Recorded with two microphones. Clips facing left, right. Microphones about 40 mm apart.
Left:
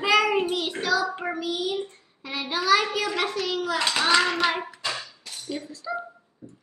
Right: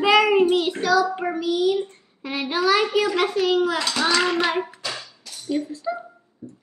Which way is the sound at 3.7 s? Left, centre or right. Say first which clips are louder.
Even; left.